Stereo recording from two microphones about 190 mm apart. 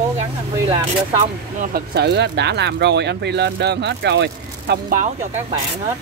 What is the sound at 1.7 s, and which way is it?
Speech, 60° right (ahead or behind).